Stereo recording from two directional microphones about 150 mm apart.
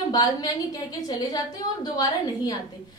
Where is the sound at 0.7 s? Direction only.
25° left (ahead or behind).